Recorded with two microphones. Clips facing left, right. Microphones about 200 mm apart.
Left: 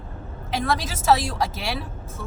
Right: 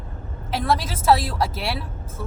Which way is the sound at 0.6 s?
Centre (ahead or behind).